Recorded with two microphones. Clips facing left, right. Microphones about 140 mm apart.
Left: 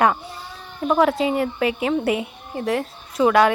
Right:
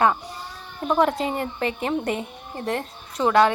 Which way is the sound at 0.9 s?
Centre (ahead or behind).